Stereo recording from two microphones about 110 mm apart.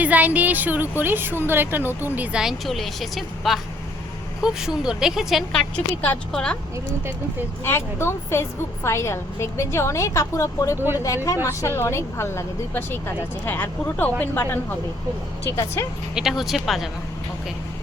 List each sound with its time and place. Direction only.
0.0 s a woman's voice: 15° right (ahead or behind); by 6.6 s 10° left (ahead or behind)
7.6 s a woman's voice: 20° left (ahead or behind)
10.8 s speech: 20° right (ahead or behind)
11.0 s a woman's voice: 30° left (ahead or behind)
16.1 s a woman's voice: 5° right (ahead or behind)